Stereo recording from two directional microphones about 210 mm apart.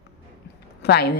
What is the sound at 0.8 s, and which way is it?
Speech, 50° left (ahead or behind).